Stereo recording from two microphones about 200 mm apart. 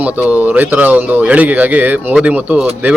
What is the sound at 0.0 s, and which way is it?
A man's voice, 10° right (ahead or behind).